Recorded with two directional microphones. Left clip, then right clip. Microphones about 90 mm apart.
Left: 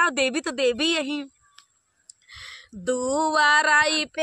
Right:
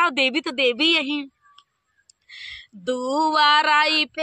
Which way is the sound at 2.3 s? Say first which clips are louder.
Right 4 dB; 40° right (ahead or behind).